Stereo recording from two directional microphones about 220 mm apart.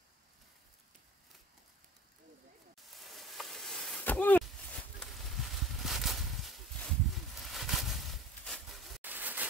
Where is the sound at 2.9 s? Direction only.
Centre (ahead or behind).